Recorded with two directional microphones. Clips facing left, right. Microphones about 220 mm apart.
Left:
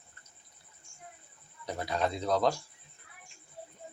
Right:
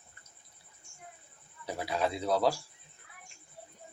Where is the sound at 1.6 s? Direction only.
5° right (ahead or behind).